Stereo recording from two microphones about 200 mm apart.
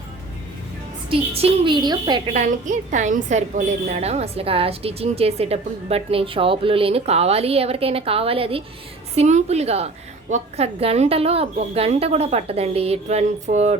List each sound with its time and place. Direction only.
1.3 s a woman's voice: 25° right (ahead or behind)
2.3 s a woman's voice: 35° right (ahead or behind)